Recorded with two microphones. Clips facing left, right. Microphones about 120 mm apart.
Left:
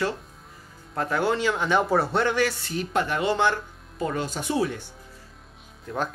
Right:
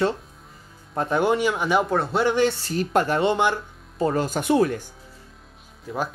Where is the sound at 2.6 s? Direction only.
40° right (ahead or behind).